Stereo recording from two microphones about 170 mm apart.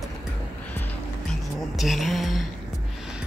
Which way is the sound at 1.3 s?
Centre (ahead or behind).